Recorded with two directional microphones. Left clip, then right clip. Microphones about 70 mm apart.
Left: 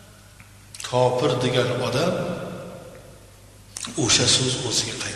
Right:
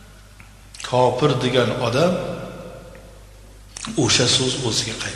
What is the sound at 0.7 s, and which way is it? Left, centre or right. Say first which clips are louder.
A man's voice: right 3 dB; left.